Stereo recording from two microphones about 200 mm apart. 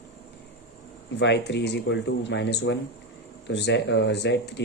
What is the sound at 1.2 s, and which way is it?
Speech, 60° left (ahead or behind).